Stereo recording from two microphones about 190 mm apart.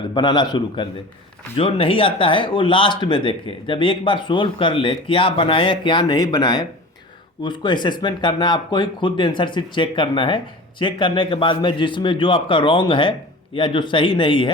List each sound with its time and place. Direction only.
0.1 s speech: 25° left (ahead or behind)